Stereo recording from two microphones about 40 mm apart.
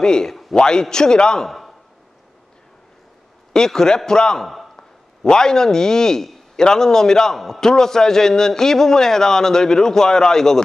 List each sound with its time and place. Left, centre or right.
0.0 s a man's voice: centre
0.3 s a sound: centre
0.6 s a man's voice: centre
3.5 s a man's voice: centre